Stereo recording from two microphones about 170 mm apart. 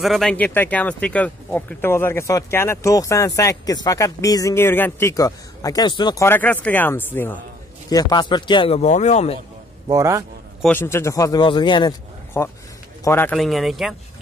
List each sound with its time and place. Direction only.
0.0 s speech: centre (ahead or behind); by 6.2 s 25° left (ahead or behind)
6.2 s speech: 10° left (ahead or behind)
7.9 s speech: 25° left (ahead or behind); by 9.4 s 40° left (ahead or behind)
9.8 s a man's voice: 20° right (ahead or behind)
10.7 s speech: 15° left (ahead or behind)
12.4 s speech: 15° left (ahead or behind)
13.4 s speech: centre (ahead or behind)